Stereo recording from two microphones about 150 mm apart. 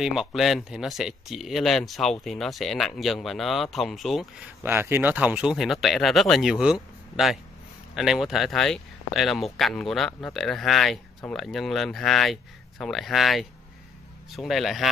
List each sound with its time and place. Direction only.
0.0 s speech: 5° right (ahead or behind)
4.6 s speech: 15° right (ahead or behind)